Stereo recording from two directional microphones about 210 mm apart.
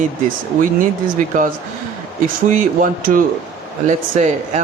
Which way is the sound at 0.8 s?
40° right (ahead or behind).